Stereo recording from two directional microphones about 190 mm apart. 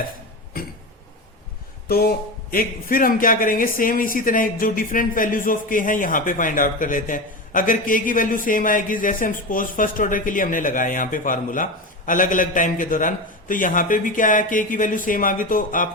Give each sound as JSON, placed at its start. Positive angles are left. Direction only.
{"t": 1.9, "sound": "speech", "side_deg": 55}